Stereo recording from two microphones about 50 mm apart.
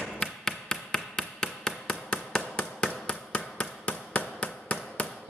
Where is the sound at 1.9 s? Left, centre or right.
Centre.